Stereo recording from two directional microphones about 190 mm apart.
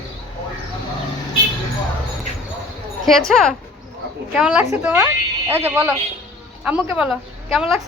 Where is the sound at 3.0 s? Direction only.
Centre (ahead or behind).